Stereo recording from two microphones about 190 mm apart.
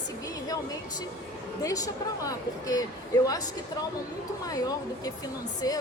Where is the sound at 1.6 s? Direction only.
20° left (ahead or behind).